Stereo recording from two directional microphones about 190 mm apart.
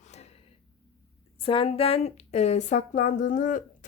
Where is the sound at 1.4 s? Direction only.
30° left (ahead or behind).